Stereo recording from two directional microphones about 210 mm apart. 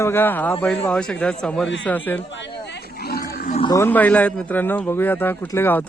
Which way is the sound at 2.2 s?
60° left (ahead or behind).